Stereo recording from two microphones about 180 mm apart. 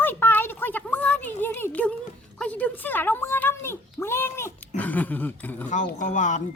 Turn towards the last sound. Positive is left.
turn(degrees=45)  # may be behind; listen again after turning